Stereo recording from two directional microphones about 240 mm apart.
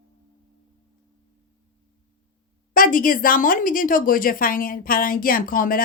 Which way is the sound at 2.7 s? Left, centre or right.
Left.